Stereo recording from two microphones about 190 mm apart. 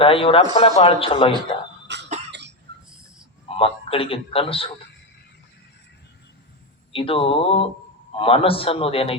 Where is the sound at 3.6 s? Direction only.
30° left (ahead or behind).